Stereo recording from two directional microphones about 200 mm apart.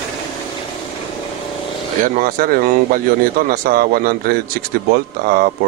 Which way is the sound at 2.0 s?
45° right (ahead or behind).